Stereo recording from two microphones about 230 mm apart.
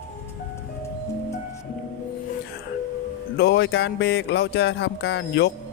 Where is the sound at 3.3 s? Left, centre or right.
Left.